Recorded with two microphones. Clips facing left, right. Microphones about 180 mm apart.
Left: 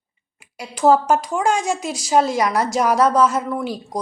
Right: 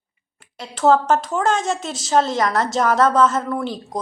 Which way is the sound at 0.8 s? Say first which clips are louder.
Left 1 dB; 10° left (ahead or behind).